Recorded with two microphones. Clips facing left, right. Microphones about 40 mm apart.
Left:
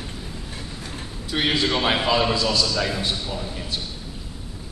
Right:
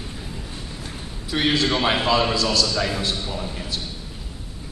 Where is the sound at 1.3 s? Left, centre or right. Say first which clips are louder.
Right 1 dB; centre.